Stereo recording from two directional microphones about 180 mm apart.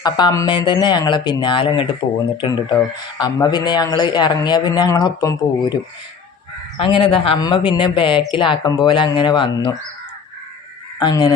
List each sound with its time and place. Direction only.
0.0 s speech: 20° left (ahead or behind)
6.7 s speech: 30° left (ahead or behind)
11.0 s speech: 25° left (ahead or behind)